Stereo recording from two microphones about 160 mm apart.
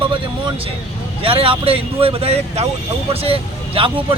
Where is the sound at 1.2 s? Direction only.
35° right (ahead or behind).